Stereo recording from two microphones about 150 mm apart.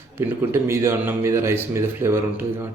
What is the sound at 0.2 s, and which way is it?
Speech, 15° right (ahead or behind).